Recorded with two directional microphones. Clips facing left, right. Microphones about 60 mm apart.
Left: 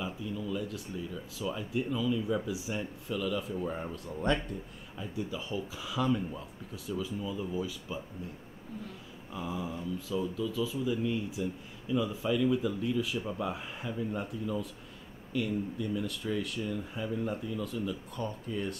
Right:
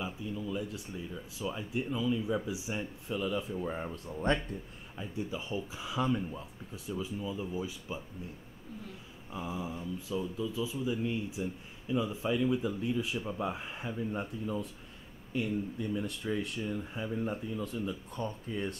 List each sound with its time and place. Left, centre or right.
0.0 s speech: centre
3.6 s speech: centre
3.9 s speech: right
9.3 s speech: centre
15.3 s speech: right